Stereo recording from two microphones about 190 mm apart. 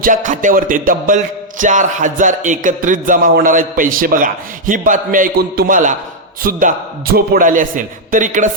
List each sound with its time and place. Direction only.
0.0 s music: 45° right (ahead or behind)